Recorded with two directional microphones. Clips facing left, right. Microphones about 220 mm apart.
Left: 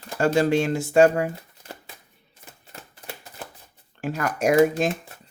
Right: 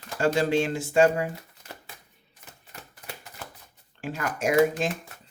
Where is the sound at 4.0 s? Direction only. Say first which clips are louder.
Left 4 dB; 40° left (ahead or behind).